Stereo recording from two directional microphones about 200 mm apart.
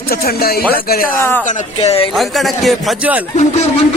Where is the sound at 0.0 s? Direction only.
50° left (ahead or behind).